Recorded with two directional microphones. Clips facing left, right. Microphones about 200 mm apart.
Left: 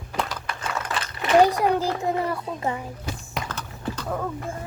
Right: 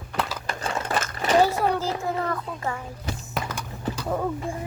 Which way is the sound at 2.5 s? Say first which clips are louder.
Left 3 dB; 20° left (ahead or behind).